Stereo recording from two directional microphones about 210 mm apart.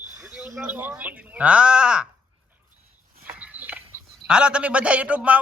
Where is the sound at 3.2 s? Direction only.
5° right (ahead or behind).